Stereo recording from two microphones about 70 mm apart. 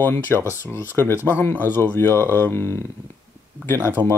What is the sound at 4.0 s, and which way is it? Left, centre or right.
Speech, right.